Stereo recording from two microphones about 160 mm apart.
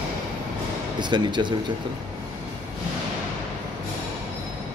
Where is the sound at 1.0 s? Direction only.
30° right (ahead or behind).